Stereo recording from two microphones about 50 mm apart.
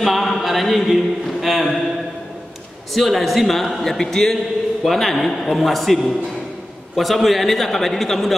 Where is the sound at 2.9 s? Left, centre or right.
Centre.